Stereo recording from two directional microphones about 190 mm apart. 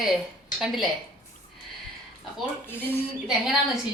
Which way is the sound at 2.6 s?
10° left (ahead or behind).